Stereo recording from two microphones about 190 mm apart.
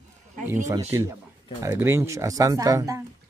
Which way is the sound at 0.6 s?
15° right (ahead or behind).